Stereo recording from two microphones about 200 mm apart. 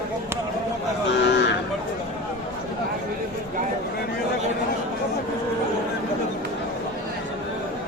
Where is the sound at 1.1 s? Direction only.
60° left (ahead or behind).